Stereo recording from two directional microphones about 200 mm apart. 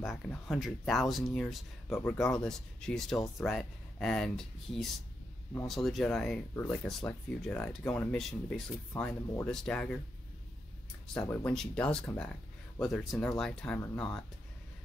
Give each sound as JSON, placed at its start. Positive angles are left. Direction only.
{"t": 0.5, "sound": "speech", "side_deg": 0}
{"t": 11.1, "sound": "speech", "side_deg": 10}